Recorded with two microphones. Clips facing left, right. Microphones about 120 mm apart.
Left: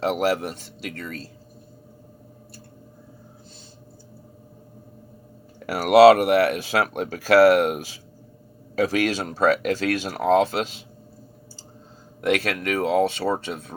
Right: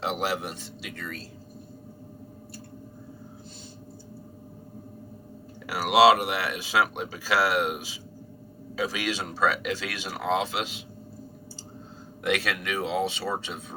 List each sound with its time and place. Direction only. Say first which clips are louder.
0.0 s speech: left 6 dB; 45° left (ahead or behind)
5.5 s speech: left 6 dB; 50° left (ahead or behind)
12.2 s speech: left 5 dB; 45° left (ahead or behind)